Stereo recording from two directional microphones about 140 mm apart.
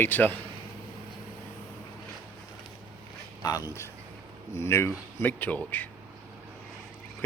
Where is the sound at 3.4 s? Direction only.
25° left (ahead or behind).